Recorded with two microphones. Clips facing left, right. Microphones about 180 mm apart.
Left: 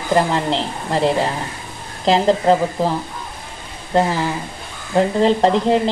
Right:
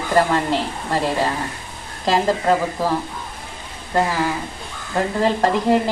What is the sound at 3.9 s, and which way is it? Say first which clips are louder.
Speech: left 3 dB; 25° left (ahead or behind).